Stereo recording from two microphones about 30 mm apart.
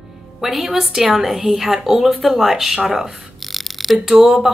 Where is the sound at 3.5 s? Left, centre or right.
Centre.